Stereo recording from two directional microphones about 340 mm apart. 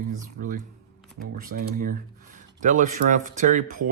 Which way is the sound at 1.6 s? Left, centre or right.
Right.